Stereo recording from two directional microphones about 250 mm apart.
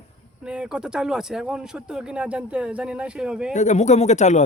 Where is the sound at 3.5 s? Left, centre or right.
Left.